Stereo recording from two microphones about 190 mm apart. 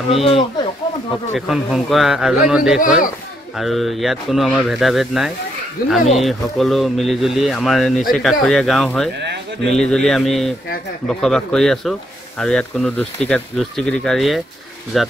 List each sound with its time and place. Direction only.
0.1 s speech: 30° left (ahead or behind)
1.3 s speech: centre (ahead or behind)